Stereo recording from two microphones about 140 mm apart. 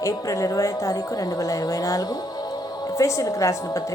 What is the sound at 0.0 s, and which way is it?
A woman's voice, 25° left (ahead or behind).